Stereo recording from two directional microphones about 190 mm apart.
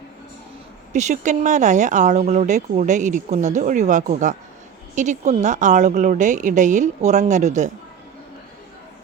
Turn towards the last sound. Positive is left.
turn(degrees=-40)  # may be behind; listen again after turning